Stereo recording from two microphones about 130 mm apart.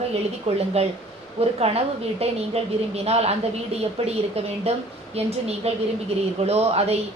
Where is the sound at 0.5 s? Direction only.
55° right (ahead or behind).